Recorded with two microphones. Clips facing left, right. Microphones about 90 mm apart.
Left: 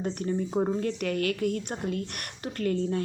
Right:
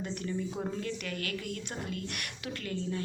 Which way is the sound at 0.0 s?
45° left (ahead or behind).